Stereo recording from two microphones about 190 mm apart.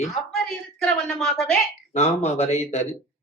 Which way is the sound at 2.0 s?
35° left (ahead or behind).